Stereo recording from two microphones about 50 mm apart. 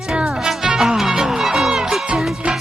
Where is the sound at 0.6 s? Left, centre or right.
Centre.